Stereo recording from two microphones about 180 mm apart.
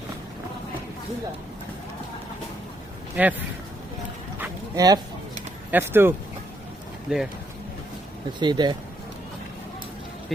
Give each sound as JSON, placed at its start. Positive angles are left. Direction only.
{"t": 3.2, "sound": "speech", "side_deg": -10}
{"t": 4.4, "sound": "a sound", "side_deg": -20}
{"t": 5.7, "sound": "speech", "side_deg": -10}
{"t": 8.4, "sound": "speech", "side_deg": -25}